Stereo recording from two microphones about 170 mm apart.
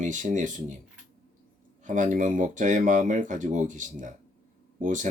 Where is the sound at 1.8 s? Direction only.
50° right (ahead or behind).